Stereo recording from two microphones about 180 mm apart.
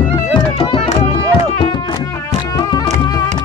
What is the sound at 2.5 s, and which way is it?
Music, 20° left (ahead or behind).